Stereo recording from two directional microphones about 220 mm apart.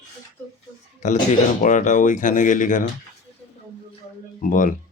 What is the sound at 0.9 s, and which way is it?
Speech, 35° left (ahead or behind).